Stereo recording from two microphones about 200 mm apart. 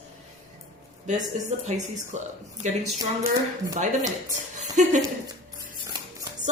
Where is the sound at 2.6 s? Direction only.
35° right (ahead or behind).